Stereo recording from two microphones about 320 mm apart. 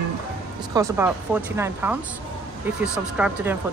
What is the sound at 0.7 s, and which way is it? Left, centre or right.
Speech, centre.